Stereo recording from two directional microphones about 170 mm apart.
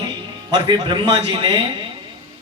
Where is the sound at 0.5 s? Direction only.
25° right (ahead or behind).